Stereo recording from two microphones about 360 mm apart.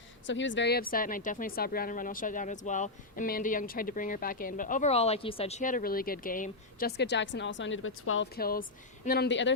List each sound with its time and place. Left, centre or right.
0.3 s speech: left